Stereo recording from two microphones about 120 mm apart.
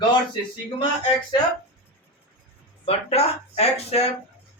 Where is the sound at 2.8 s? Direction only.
60° left (ahead or behind).